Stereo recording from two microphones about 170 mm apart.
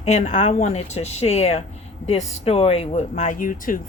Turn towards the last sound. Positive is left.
turn(degrees=55)  # may be behind; listen again after turning